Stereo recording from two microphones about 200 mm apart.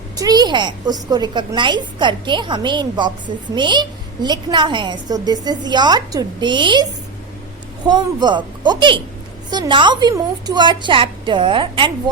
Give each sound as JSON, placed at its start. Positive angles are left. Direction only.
{"t": 0.2, "sound": "a woman's voice", "side_deg": -20}
{"t": 7.9, "sound": "a woman's voice", "side_deg": -20}